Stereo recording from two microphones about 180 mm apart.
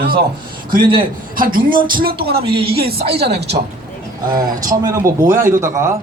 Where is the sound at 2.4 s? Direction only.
30° right (ahead or behind).